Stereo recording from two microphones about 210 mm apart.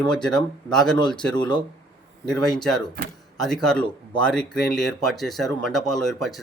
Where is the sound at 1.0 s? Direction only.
20° left (ahead or behind).